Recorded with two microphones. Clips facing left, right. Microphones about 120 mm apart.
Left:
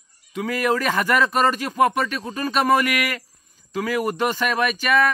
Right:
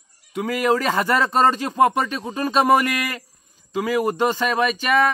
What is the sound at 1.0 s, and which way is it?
Speech, 30° right (ahead or behind).